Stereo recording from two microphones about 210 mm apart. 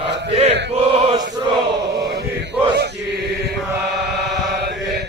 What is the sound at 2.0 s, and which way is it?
Chant, 50° right (ahead or behind).